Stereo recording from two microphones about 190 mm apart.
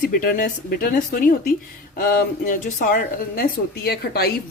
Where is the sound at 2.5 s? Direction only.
45° left (ahead or behind).